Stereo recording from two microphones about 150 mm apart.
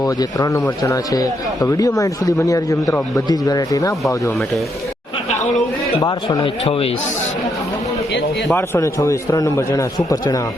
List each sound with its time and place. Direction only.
0.0 s a man's voice: 25° left (ahead or behind)
5.3 s speech: 55° left (ahead or behind)
6.0 s a man's voice: 25° left (ahead or behind)
8.5 s a man's voice: 20° left (ahead or behind)